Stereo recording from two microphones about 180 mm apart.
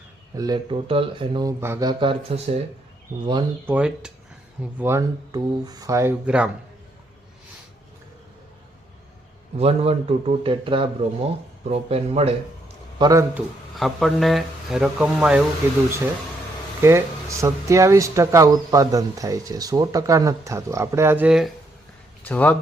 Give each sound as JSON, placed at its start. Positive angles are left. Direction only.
{"t": 0.3, "sound": "speech", "side_deg": -20}
{"t": 3.7, "sound": "speech", "side_deg": -5}
{"t": 9.6, "sound": "speech", "side_deg": -35}
{"t": 13.0, "sound": "speech", "side_deg": -20}
{"t": 13.3, "sound": "speech", "side_deg": 0}
{"t": 16.8, "sound": "speech", "side_deg": -15}
{"t": 22.2, "sound": "speech", "side_deg": 10}